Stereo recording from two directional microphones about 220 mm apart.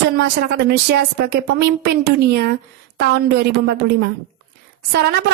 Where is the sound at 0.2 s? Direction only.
45° right (ahead or behind).